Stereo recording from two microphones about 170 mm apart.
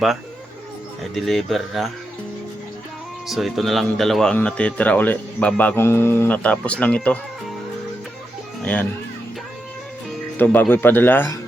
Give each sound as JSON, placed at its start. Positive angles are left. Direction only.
{"t": 1.1, "sound": "speech", "side_deg": 0}
{"t": 3.2, "sound": "speech", "side_deg": 0}
{"t": 8.6, "sound": "speech", "side_deg": 10}
{"t": 10.3, "sound": "speech", "side_deg": 10}